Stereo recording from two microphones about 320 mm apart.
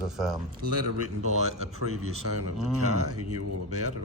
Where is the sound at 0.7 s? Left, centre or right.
Right.